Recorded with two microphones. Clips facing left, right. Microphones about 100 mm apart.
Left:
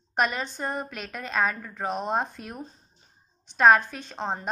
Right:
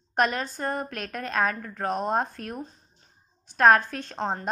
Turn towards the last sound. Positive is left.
turn(degrees=15)  # may be behind; listen again after turning